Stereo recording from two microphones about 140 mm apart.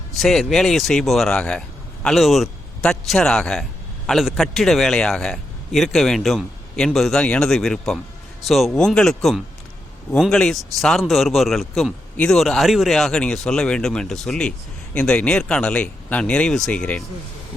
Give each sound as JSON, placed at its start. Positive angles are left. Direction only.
{"t": 0.2, "sound": "a man's voice", "side_deg": 0}